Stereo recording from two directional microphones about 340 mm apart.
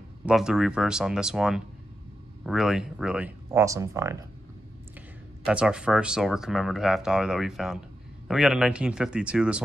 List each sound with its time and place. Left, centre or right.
0.2 s speech: centre
5.4 s speech: centre